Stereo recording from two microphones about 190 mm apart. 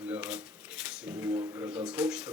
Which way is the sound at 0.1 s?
5° right (ahead or behind).